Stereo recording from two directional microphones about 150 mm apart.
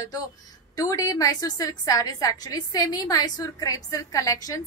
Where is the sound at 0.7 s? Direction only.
20° left (ahead or behind).